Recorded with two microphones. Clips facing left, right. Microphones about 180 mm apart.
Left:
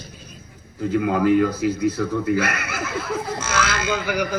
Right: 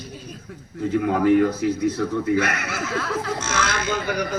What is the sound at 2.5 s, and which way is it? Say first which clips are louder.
Laughter: right 1 dB; 75° right (ahead or behind).